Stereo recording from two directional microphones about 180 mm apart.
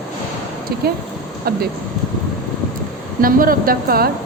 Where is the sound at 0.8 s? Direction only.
60° right (ahead or behind).